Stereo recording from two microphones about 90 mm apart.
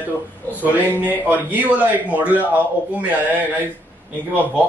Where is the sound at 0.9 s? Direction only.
20° right (ahead or behind).